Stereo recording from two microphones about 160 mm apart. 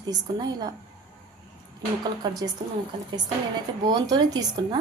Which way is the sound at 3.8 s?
25° right (ahead or behind).